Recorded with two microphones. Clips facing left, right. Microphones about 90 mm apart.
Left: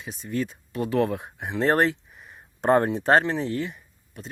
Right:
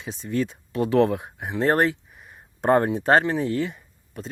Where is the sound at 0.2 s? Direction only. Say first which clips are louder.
Right 3 dB; 90° right.